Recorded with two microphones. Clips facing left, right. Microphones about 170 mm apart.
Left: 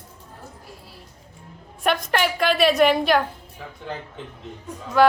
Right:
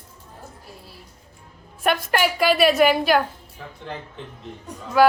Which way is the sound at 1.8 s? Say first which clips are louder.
Right 1 dB; 5° right (ahead or behind).